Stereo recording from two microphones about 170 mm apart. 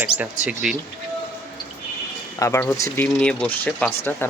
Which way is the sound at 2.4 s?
20° left (ahead or behind).